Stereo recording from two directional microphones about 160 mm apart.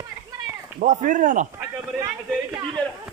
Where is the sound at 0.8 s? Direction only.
50° right (ahead or behind).